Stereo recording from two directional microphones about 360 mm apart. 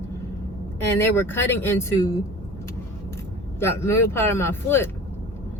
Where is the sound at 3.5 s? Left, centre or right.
Centre.